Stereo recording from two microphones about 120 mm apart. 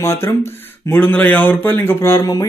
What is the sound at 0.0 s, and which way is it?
A man's voice, 20° left (ahead or behind).